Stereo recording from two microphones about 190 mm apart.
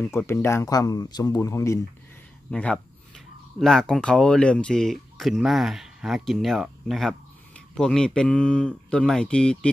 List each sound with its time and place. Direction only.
0.2 s speech: 10° left (ahead or behind)
2.5 s speech: 5° left (ahead or behind)